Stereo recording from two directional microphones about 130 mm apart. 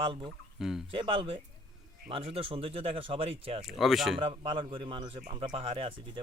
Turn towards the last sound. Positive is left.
turn(degrees=-45)  # may be behind; listen again after turning